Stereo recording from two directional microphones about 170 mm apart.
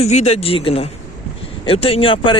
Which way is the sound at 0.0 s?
40° left (ahead or behind).